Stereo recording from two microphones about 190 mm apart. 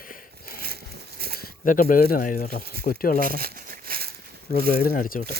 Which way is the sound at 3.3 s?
50° right (ahead or behind).